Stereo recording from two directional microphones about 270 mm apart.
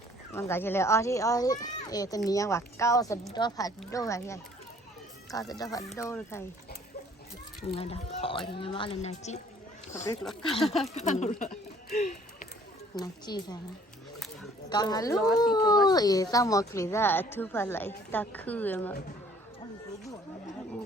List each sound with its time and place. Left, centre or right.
0.3 s a woman's voice: centre
7.7 s speech: left
10.0 s a woman's voice: centre
10.9 s speech: left
13.0 s a woman's voice: centre
14.7 s a woman's voice: centre